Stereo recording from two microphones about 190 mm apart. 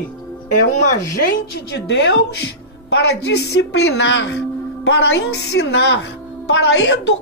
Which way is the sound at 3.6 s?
75° left (ahead or behind).